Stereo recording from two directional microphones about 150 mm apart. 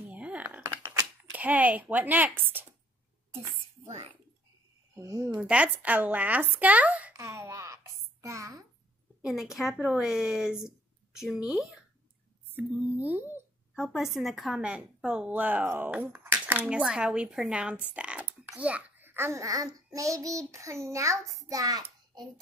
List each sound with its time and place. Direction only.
0.1 s typing: 10° right (ahead or behind)
1.3 s a woman's voice: 10° right (ahead or behind)
3.9 s speech: 40° right (ahead or behind)
4.9 s a child's voice: 20° right (ahead or behind)
5.4 s speech: 10° right (ahead or behind)
9.2 s a woman's voice: 5° right (ahead or behind)
12.5 s a woman's voice: 10° right (ahead or behind)